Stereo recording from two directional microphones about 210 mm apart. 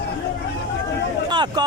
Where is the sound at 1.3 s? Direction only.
20° right (ahead or behind).